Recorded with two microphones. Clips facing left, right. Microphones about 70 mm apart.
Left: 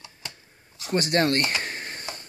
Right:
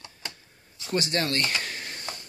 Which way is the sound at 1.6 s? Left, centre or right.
Left.